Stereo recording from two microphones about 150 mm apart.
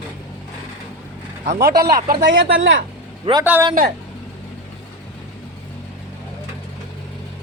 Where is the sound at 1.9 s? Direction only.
75° right (ahead or behind).